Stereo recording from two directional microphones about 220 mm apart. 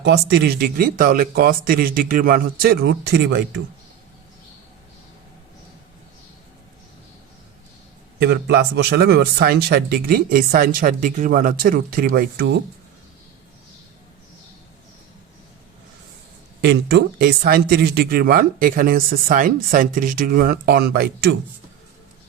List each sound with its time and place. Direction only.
0.0 s speech: 50° right (ahead or behind)
8.2 s speech: 50° right (ahead or behind)
16.6 s speech: 50° right (ahead or behind)